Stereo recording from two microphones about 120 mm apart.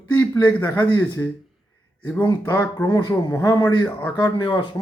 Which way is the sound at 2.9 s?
30° left (ahead or behind).